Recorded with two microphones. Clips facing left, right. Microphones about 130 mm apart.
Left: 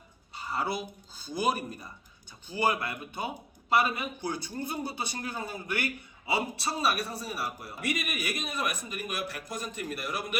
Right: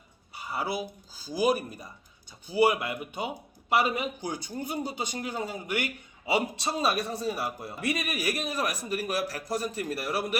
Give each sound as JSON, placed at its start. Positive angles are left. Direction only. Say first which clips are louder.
{"t": 0.5, "sound": "speech", "louder": "right 1 dB", "side_deg": -5}